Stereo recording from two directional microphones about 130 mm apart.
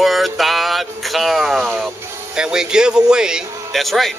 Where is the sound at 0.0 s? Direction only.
Centre (ahead or behind).